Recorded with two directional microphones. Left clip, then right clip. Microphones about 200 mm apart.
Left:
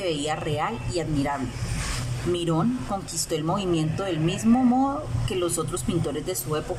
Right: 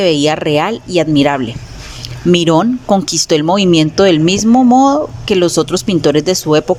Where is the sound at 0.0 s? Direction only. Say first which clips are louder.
Right 15 dB; 50° right (ahead or behind).